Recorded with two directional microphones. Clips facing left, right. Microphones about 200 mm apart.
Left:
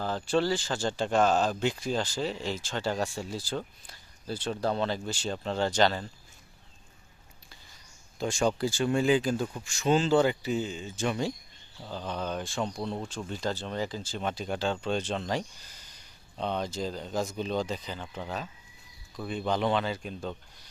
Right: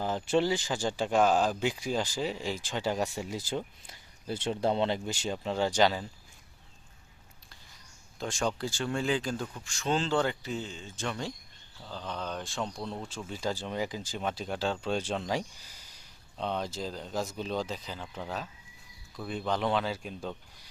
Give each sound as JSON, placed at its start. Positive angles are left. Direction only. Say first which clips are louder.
{"t": 0.0, "sound": "speech", "louder": "even", "side_deg": -20}
{"t": 8.2, "sound": "speech", "louder": "left 5 dB", "side_deg": 5}
{"t": 14.2, "sound": "speech", "louder": "left 1 dB", "side_deg": 0}